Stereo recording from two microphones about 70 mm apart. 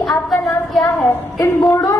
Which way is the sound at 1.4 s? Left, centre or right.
Left.